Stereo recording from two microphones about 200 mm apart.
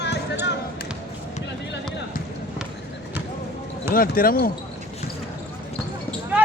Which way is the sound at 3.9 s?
45° left (ahead or behind).